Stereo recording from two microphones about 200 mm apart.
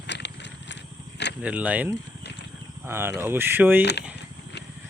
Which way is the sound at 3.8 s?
55° left (ahead or behind).